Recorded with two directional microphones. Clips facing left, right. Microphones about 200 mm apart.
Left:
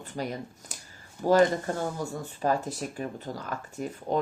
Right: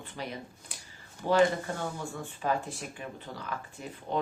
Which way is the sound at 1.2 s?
40° left (ahead or behind).